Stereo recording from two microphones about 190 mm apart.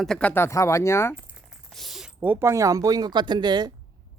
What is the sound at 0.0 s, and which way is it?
Speech, 5° left (ahead or behind).